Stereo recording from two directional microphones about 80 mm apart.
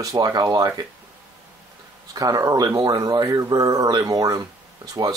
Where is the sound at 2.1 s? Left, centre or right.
Right.